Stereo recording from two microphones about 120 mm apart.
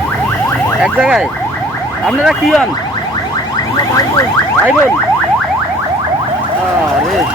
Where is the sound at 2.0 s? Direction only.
Centre (ahead or behind).